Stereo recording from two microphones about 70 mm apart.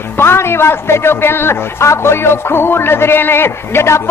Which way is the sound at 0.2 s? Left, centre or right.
Left.